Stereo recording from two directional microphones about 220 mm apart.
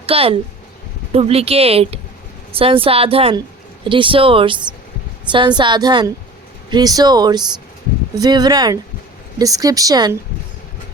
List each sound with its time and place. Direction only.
0.0 s a woman's voice: 25° right (ahead or behind)